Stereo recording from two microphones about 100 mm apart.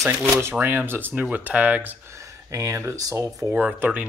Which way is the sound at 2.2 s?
30° right (ahead or behind).